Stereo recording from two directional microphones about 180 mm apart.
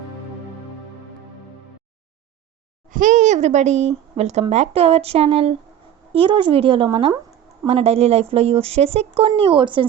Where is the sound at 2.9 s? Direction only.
45° right (ahead or behind).